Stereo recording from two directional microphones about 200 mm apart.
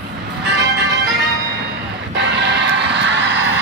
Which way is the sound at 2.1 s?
60° right (ahead or behind).